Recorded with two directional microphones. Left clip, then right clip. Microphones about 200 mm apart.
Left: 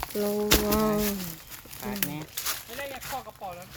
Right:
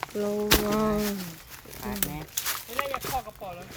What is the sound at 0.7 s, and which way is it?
Crumpling, 5° left (ahead or behind).